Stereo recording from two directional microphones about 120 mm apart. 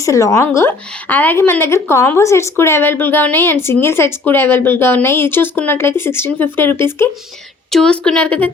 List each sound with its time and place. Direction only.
0.0 s a woman's voice: 25° left (ahead or behind)
7.7 s a woman's voice: 5° left (ahead or behind)